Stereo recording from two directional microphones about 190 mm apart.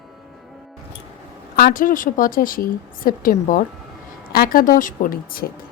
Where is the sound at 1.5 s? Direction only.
50° left (ahead or behind).